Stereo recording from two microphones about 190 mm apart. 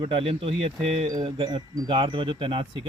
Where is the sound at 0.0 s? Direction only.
25° right (ahead or behind).